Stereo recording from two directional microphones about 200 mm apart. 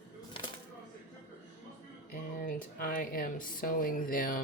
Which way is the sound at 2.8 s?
45° left (ahead or behind).